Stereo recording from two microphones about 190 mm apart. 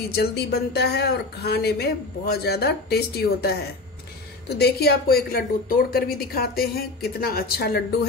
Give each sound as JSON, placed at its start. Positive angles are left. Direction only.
{"t": 0.1, "sound": "a woman's voice", "side_deg": 55}